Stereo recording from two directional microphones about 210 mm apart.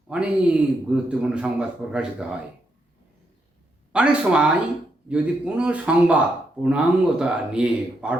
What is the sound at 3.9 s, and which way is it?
A man's voice, 5° right (ahead or behind).